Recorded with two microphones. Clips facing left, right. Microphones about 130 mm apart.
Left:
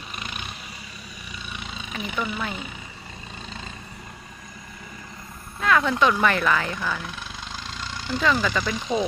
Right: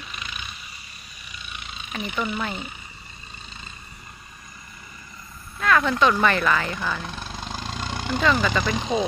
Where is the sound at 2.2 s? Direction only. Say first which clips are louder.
Right 1 dB; 5° left (ahead or behind).